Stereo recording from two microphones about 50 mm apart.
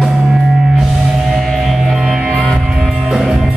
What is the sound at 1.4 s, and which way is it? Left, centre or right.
Music, centre.